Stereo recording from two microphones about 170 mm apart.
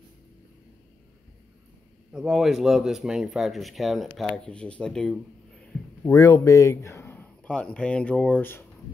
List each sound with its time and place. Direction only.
2.1 s speech: 5° right (ahead or behind)
6.0 s speech: 20° left (ahead or behind)